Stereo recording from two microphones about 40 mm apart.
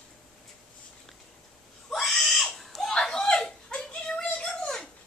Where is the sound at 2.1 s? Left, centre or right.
Centre.